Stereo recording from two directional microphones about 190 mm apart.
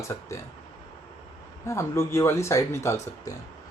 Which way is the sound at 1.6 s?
15° left (ahead or behind).